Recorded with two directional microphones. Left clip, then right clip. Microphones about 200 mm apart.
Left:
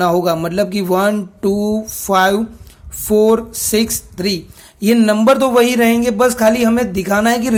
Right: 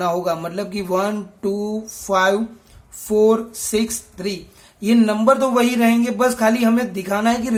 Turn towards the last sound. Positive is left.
turn(degrees=35)  # may be behind; listen again after turning